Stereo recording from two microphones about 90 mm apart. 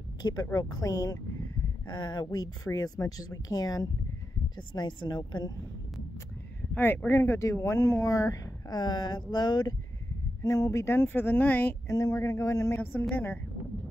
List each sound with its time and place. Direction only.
0.2 s speech: 45° left (ahead or behind)
1.9 s speech: 55° left (ahead or behind)
4.7 s speech: 55° left (ahead or behind)
6.7 s speech: 20° left (ahead or behind); by 9.8 s 50° left (ahead or behind)
10.4 s speech: 40° left (ahead or behind); by 11.7 s 20° left (ahead or behind)
11.9 s speech: 35° left (ahead or behind)